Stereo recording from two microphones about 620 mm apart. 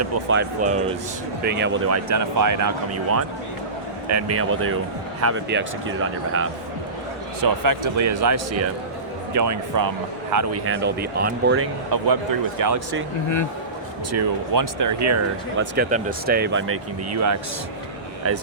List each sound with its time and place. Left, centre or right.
0.0 s speech: centre
7.4 s speech: right
11.9 s speech: right
14.1 s speech: right
15.7 s speech: centre